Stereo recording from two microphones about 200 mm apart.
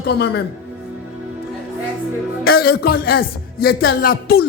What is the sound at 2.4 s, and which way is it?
Speech, 50° left (ahead or behind).